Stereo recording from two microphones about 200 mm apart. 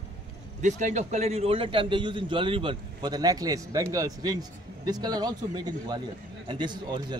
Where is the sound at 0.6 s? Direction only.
40° right (ahead or behind).